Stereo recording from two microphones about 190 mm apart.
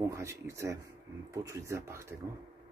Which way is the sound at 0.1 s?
15° right (ahead or behind).